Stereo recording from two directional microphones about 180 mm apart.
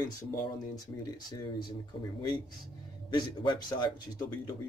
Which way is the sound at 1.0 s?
25° left (ahead or behind).